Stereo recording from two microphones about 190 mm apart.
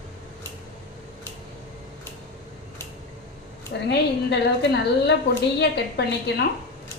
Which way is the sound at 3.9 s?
60° left (ahead or behind).